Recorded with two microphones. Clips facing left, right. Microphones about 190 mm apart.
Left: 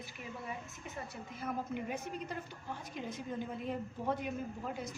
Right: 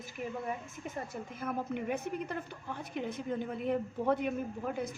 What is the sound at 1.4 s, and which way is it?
Speech, 55° right (ahead or behind).